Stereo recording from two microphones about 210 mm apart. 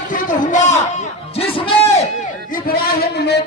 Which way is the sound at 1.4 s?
25° left (ahead or behind).